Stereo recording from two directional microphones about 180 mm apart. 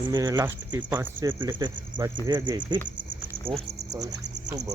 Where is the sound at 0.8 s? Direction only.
10° right (ahead or behind).